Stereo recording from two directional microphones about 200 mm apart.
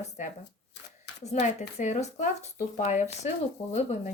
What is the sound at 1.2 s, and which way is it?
Speech, 35° left (ahead or behind).